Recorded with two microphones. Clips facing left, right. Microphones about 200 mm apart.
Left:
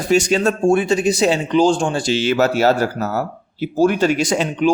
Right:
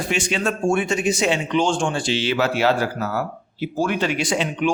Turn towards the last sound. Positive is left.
turn(degrees=40)  # may be behind; listen again after turning